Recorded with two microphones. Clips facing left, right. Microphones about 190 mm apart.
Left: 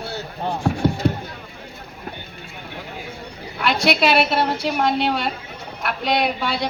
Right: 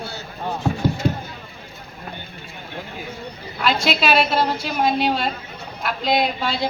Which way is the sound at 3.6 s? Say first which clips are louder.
Left 1 dB; 65° left (ahead or behind).